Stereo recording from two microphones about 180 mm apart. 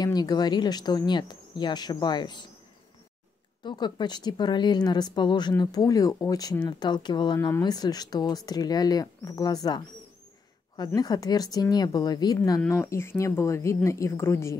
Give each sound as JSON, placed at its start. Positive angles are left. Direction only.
{"t": 0.0, "sound": "speech", "side_deg": 20}
{"t": 3.6, "sound": "speech", "side_deg": 25}
{"t": 11.0, "sound": "a woman's voice", "side_deg": 20}